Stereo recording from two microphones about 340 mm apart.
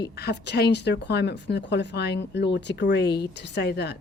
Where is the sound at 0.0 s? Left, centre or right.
Left.